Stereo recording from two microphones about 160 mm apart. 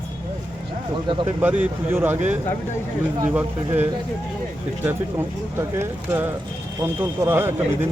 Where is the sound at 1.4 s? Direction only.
10° right (ahead or behind).